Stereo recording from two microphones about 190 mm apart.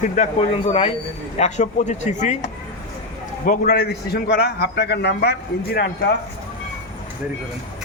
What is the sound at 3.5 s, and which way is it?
A man's voice, 50° left (ahead or behind).